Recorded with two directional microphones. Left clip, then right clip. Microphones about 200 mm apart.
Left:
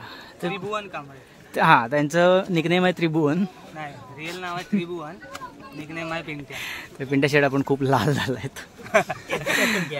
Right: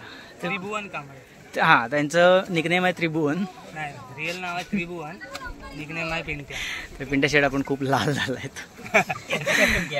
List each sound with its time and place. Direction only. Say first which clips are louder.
0.5 s speech: left 1 dB; 10° left (ahead or behind)
1.5 s speech: left 1 dB; 35° left (ahead or behind)
3.7 s speech: right 2 dB; 10° left (ahead or behind)
6.5 s speech: right 2 dB; 35° left (ahead or behind)
8.9 s speech: even; 15° left (ahead or behind)
9.5 s speech: right 2 dB; 35° left (ahead or behind)